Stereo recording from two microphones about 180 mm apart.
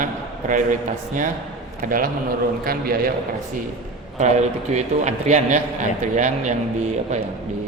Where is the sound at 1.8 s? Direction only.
50° right (ahead or behind).